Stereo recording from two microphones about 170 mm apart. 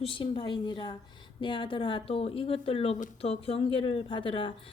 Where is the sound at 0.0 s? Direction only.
30° left (ahead or behind).